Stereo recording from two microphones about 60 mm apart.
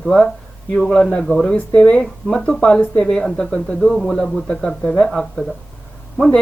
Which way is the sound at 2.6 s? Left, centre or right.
Left.